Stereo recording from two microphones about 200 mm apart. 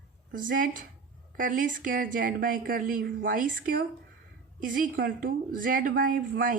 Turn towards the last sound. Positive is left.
turn(degrees=-45)  # may be behind; listen again after turning